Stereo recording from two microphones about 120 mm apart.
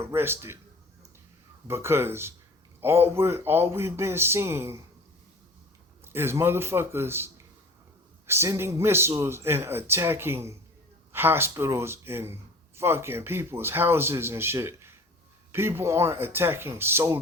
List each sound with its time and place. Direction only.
0.0 s speech: 20° right (ahead or behind)
1.6 s speech: 20° right (ahead or behind)
6.1 s speech: 20° right (ahead or behind)
8.3 s speech: 20° right (ahead or behind)